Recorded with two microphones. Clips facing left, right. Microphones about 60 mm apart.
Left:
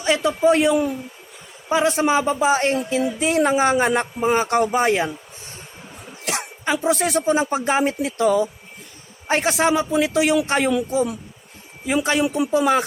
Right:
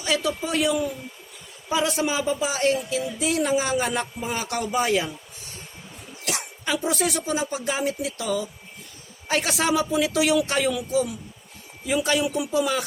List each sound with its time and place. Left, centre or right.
0.0 s a man's voice: left
6.2 s a man's voice: left
11.9 s speech: left